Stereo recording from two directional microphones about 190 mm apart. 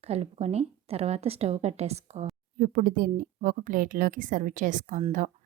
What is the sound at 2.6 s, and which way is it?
A woman's voice, 45° right (ahead or behind).